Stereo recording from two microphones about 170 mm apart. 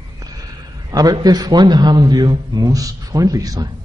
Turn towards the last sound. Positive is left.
turn(degrees=-20)  # may be behind; listen again after turning